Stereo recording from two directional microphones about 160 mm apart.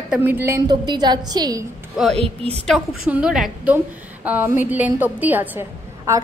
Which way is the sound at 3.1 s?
5° right (ahead or behind).